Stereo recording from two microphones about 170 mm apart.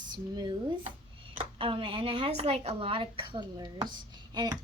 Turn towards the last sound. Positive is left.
turn(degrees=-25)  # may be behind; listen again after turning